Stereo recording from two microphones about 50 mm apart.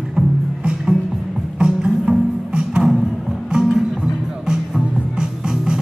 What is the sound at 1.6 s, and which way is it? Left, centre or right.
Music, centre.